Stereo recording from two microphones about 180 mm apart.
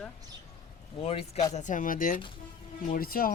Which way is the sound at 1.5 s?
45° left (ahead or behind).